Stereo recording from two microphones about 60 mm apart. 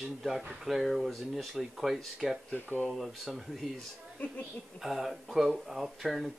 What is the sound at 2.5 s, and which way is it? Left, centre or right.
Speech, left.